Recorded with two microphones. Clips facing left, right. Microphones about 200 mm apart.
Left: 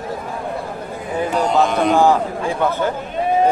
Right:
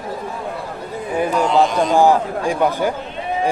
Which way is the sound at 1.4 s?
55° left (ahead or behind).